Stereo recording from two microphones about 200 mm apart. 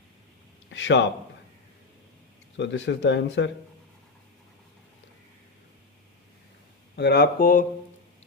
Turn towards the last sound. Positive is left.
turn(degrees=45)  # may be behind; listen again after turning